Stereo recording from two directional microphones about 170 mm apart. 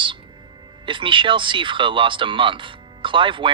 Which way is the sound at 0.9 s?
30° right (ahead or behind).